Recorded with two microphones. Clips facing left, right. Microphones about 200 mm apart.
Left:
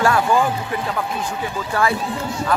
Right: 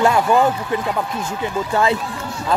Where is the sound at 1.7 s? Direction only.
25° right (ahead or behind).